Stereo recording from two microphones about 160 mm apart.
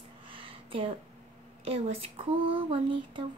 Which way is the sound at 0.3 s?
35° right (ahead or behind).